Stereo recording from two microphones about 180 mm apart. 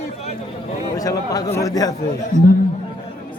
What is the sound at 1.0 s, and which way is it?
Speech, 20° left (ahead or behind).